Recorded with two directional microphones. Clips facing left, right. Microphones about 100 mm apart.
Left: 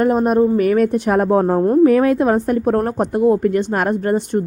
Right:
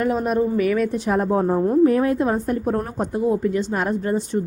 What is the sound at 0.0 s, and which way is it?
Speech, 45° left (ahead or behind).